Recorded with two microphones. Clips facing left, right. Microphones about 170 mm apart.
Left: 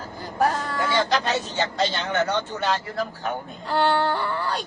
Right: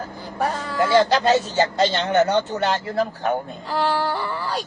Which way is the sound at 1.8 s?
25° right (ahead or behind).